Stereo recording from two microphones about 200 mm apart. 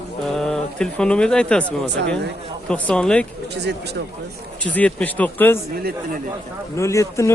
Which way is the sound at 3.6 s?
55° right (ahead or behind).